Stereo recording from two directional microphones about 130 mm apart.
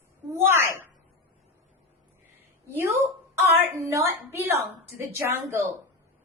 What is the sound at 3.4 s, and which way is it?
A woman's voice, 25° right (ahead or behind).